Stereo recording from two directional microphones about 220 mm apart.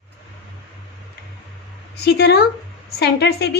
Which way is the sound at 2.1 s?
45° left (ahead or behind).